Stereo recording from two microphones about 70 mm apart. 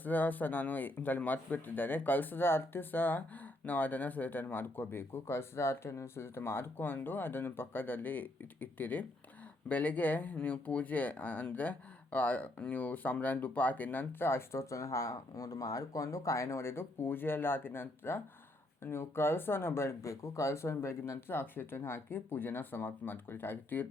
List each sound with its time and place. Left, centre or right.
0.0 s speech: left